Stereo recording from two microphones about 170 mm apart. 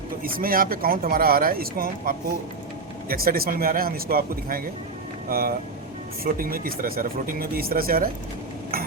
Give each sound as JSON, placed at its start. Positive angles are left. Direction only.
{"t": 0.3, "sound": "speech", "side_deg": -55}